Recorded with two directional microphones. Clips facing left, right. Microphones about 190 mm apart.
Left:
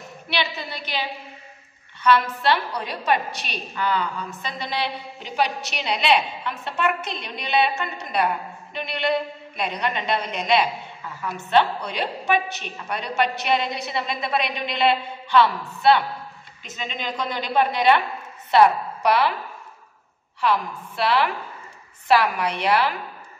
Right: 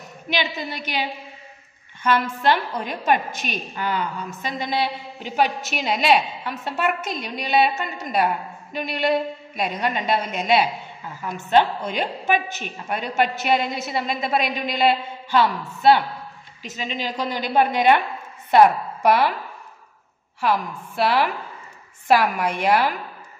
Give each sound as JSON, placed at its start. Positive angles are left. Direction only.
{"t": 0.3, "sound": "a woman's voice", "side_deg": -45}
{"t": 2.0, "sound": "a woman's voice", "side_deg": -45}
{"t": 11.5, "sound": "a woman's voice", "side_deg": -45}
{"t": 20.3, "sound": "a woman's voice", "side_deg": -45}